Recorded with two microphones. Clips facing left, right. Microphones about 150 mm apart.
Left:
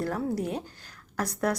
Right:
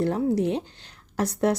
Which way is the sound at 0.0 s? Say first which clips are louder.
Right 6 dB; 25° right (ahead or behind).